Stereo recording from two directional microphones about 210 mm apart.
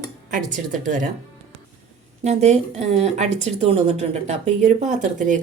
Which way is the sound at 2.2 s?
30° right (ahead or behind).